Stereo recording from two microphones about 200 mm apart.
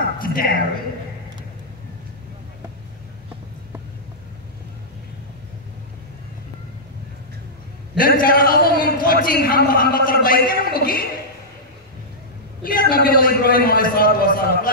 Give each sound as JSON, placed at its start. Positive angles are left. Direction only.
{"t": 0.2, "sound": "a sound", "side_deg": 45}
{"t": 8.0, "sound": "a man's voice", "side_deg": 45}
{"t": 12.6, "sound": "a man's voice", "side_deg": 45}